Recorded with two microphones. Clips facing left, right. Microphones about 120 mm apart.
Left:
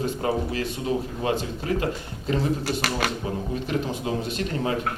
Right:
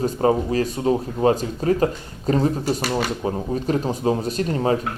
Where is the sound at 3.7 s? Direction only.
40° right (ahead or behind).